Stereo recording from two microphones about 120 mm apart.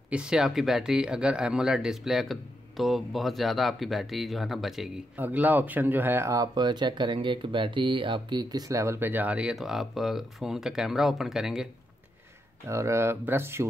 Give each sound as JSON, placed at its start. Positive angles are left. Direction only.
{"t": 0.1, "sound": "speech", "side_deg": -5}
{"t": 5.1, "sound": "speech", "side_deg": -15}
{"t": 12.6, "sound": "speech", "side_deg": -25}